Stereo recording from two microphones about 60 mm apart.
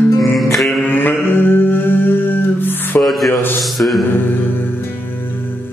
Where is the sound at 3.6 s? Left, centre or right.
Centre.